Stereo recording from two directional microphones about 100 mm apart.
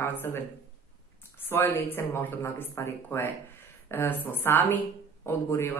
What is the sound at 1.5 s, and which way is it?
Speech, 20° left (ahead or behind).